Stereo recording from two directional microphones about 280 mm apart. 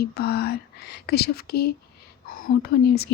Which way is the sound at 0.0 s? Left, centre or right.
Left.